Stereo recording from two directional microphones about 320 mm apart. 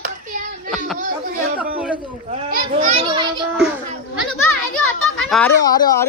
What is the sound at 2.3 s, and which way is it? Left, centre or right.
Children playing, right.